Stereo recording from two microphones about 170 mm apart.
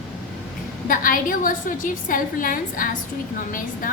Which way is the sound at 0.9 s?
55° left (ahead or behind).